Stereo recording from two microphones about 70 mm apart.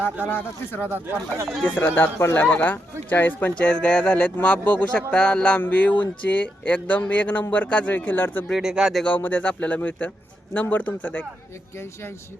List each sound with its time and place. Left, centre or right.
0.3 s speech: left
0.9 s speech: right
1.8 s speech: left
2.4 s speech: left
5.5 s speech: left
8.4 s speech: centre
9.0 s speech: left